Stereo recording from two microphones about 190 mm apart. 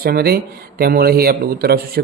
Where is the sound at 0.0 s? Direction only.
55° right (ahead or behind).